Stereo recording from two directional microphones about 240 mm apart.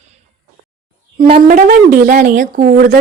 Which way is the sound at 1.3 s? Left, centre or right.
Right.